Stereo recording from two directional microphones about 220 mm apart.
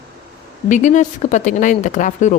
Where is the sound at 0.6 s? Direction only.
35° left (ahead or behind).